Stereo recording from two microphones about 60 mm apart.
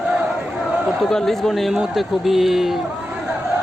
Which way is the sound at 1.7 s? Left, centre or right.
Centre.